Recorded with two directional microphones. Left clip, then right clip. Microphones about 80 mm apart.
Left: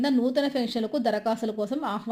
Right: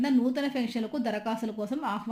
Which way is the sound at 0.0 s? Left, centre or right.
Left.